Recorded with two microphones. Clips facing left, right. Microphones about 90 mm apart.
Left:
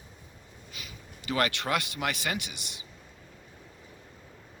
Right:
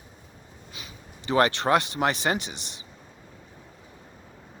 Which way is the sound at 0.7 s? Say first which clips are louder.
Right 1 dB; 25° right (ahead or behind).